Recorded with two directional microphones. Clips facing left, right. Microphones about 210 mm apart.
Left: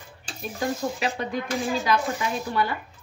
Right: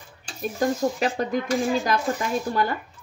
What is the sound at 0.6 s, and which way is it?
Speech, 45° right (ahead or behind).